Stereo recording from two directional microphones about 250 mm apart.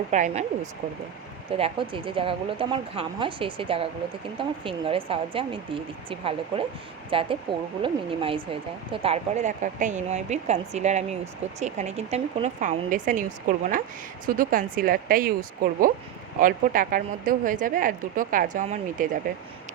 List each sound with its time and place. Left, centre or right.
0.1 s speech: right
14.3 s speech: right